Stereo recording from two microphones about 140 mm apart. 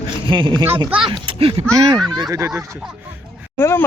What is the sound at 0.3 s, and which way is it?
Speech, 35° right (ahead or behind).